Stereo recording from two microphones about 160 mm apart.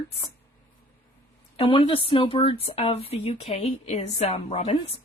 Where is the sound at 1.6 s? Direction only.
35° left (ahead or behind).